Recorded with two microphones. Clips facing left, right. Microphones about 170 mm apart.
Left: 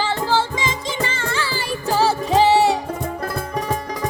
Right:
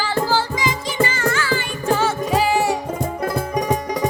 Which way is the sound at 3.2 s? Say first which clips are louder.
Right 3 dB; 10° right (ahead or behind).